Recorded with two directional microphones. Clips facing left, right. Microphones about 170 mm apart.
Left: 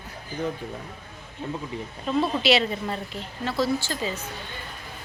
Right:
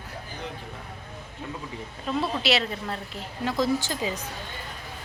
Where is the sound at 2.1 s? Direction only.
5° right (ahead or behind).